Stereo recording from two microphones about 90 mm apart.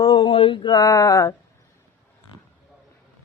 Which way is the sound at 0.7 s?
40° left (ahead or behind).